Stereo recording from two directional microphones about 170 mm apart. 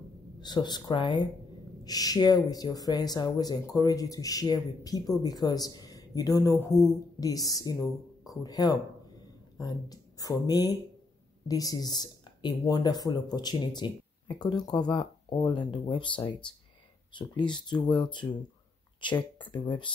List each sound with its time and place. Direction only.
0.4 s speech: 25° left (ahead or behind)
19.5 s speech: 25° left (ahead or behind)